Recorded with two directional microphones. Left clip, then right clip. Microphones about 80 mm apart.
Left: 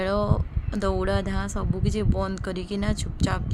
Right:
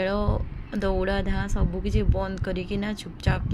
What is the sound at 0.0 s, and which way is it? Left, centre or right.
A woman's voice, centre.